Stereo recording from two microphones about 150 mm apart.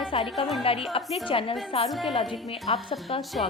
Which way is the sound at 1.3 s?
35° left (ahead or behind).